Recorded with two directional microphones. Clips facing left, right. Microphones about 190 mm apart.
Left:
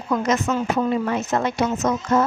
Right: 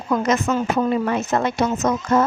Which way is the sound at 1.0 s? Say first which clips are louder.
Right 2 dB; 55° right (ahead or behind).